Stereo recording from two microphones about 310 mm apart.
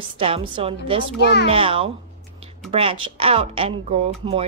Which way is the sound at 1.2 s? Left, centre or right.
Left.